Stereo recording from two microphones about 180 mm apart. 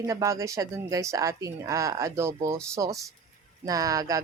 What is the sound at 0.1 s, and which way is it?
Speech, 15° right (ahead or behind).